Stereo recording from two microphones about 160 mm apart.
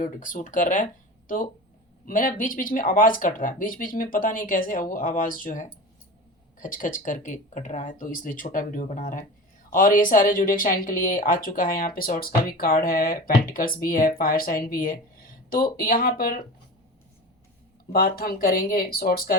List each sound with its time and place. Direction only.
0.0 s speech: 55° left (ahead or behind)
2.0 s speech: 60° left (ahead or behind)
17.9 s speech: 65° left (ahead or behind)